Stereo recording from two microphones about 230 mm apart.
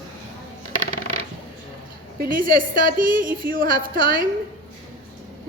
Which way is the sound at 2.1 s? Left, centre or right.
Right.